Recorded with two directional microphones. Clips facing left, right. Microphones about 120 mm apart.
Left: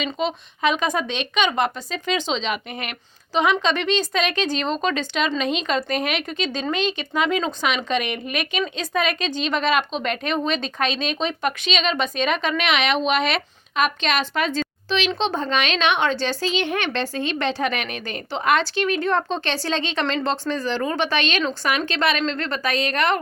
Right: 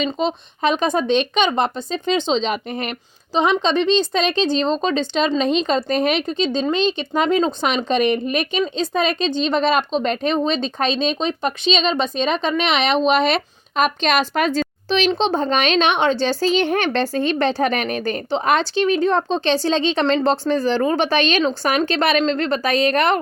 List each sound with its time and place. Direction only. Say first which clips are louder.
0.0 s speech: right 4 dB; 35° right (ahead or behind)